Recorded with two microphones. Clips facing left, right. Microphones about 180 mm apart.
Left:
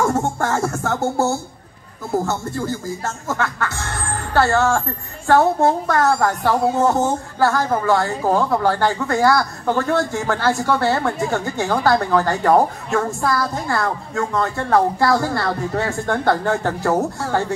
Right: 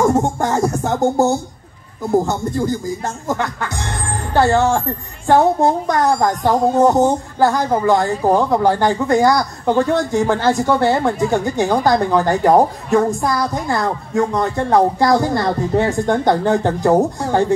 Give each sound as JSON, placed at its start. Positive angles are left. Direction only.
{"t": 0.0, "sound": "music", "side_deg": -15}
{"t": 2.0, "sound": "speech", "side_deg": -15}